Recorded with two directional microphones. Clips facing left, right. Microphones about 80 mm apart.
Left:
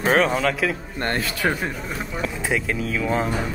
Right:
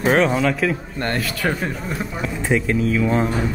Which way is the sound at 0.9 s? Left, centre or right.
Left.